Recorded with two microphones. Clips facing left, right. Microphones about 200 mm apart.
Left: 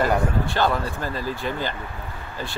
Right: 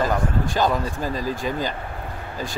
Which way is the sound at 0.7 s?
15° right (ahead or behind).